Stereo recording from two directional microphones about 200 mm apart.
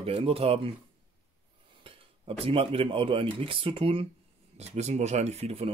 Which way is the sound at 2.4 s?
25° right (ahead or behind).